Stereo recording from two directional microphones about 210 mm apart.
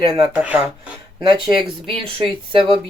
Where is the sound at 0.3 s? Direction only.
5° right (ahead or behind).